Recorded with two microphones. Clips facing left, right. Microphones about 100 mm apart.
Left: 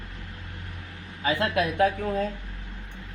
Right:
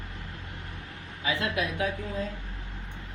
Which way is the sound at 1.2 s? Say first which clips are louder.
Left 5 dB; 45° left (ahead or behind).